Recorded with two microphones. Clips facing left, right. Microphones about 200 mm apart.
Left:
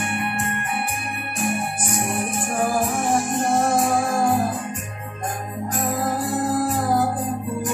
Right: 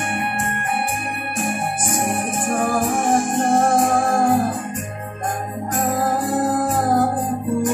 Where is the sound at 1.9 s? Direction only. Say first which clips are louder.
Right 2 dB; 50° right (ahead or behind).